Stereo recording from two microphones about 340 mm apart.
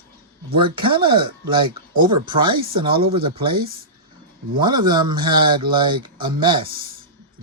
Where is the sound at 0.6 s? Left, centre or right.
Centre.